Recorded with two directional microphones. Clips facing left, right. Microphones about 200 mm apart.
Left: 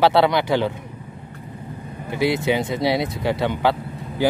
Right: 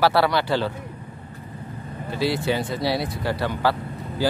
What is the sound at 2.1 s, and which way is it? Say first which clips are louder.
Speech: left 3 dB; 20° left (ahead or behind).